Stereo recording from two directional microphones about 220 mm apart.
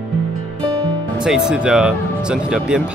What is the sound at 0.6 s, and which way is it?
Music, 20° right (ahead or behind).